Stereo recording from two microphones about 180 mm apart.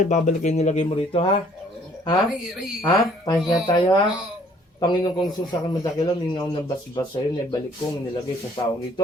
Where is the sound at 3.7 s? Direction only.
25° left (ahead or behind).